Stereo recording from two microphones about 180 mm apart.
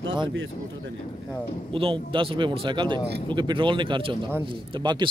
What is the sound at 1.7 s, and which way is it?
Speech, 30° right (ahead or behind).